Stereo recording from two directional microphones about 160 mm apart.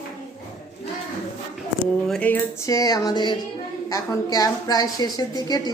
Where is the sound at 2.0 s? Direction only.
5° left (ahead or behind).